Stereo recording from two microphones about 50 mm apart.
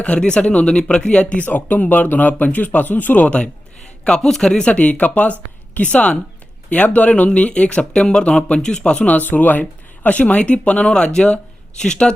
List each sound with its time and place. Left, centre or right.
0.0 s speech: left
1.5 s speech: left
3.2 s a man's voice: left
4.7 s speech: left